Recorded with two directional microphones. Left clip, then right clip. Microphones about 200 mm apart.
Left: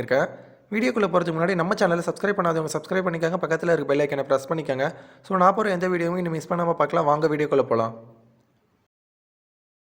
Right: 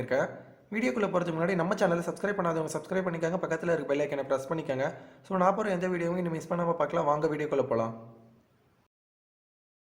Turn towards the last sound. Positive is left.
turn(degrees=30)  # may be behind; listen again after turning